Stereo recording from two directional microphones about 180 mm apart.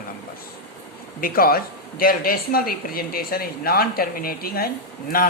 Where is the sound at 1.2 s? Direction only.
55° left (ahead or behind).